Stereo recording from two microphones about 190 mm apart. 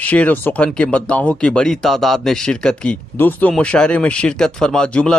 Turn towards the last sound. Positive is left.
turn(degrees=5)  # may be behind; listen again after turning